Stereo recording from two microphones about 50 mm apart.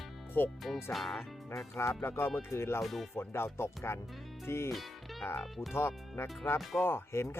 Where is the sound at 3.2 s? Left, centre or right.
Left.